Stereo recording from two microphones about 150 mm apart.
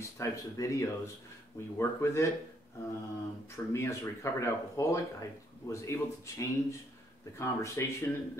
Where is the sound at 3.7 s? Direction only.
20° left (ahead or behind).